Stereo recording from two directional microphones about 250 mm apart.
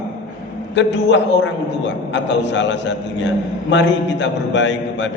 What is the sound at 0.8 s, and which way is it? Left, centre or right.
A man's voice, left.